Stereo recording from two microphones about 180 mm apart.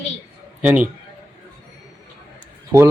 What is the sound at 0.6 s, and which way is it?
Speech, 10° right (ahead or behind).